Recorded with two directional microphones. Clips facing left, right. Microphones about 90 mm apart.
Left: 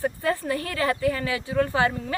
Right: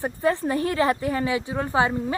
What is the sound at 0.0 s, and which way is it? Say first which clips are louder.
Speech: right 2 dB; 25° right (ahead or behind).